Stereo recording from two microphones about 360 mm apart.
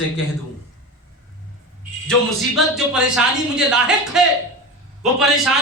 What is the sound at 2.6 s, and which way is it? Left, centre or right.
A woman's voice, centre.